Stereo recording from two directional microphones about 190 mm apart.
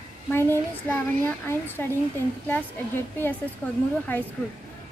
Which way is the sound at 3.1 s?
10° left (ahead or behind).